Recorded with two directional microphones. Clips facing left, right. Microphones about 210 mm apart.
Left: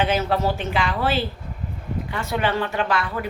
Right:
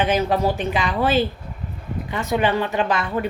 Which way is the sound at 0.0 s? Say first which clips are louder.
Right 2 dB; 15° right (ahead or behind).